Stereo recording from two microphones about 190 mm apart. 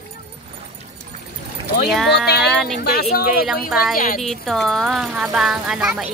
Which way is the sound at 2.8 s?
55° left (ahead or behind).